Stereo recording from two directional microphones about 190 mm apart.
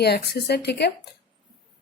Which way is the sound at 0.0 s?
60° left (ahead or behind).